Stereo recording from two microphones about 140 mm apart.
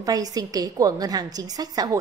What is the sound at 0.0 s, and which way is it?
A woman's voice, 25° right (ahead or behind).